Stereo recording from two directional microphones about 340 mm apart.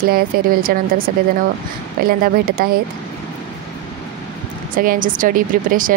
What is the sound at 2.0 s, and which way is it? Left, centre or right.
Speech, right.